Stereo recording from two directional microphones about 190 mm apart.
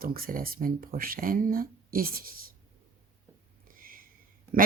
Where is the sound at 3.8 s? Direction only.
50° right (ahead or behind).